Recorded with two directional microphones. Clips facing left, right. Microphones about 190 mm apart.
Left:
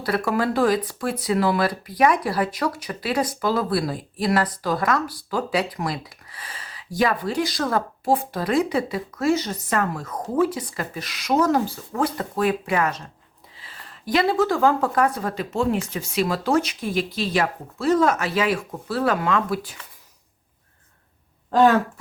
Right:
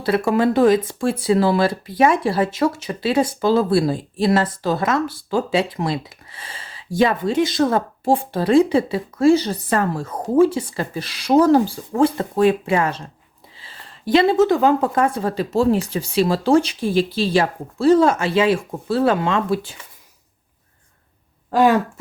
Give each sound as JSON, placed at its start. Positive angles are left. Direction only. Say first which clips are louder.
{"t": 0.0, "sound": "speech", "louder": "right 5 dB", "side_deg": -25}
{"t": 21.5, "sound": "speech", "louder": "right 1 dB", "side_deg": -10}